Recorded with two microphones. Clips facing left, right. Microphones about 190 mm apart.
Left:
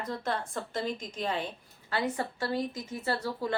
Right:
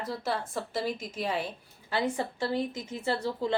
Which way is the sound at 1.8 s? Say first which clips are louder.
Right 2 dB; 15° right (ahead or behind).